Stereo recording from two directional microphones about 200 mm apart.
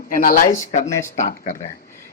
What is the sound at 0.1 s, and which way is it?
Speech, 40° left (ahead or behind).